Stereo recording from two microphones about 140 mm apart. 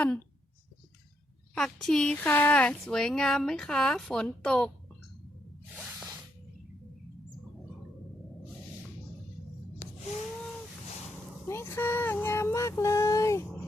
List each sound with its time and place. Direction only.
1.5 s speech: 5° left (ahead or behind)
11.4 s speech: 20° left (ahead or behind)